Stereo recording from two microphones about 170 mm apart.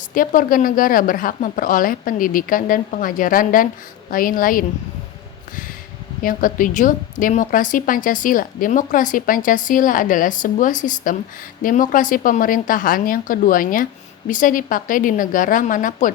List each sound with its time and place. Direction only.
0.1 s a woman's voice: 55° left (ahead or behind)
6.2 s a woman's voice: 55° left (ahead or behind)